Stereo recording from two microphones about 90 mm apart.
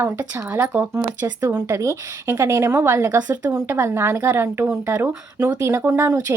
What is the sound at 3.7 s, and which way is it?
A woman's voice, 25° right (ahead or behind).